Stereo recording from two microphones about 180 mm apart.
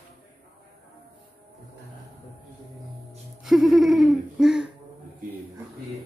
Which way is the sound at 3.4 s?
Centre (ahead or behind).